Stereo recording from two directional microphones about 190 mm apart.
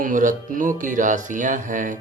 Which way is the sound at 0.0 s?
45° right (ahead or behind).